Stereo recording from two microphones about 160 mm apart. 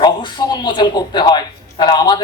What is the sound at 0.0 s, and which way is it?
A man's voice, 30° left (ahead or behind).